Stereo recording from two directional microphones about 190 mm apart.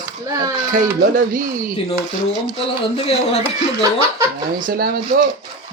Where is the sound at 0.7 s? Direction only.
45° right (ahead or behind).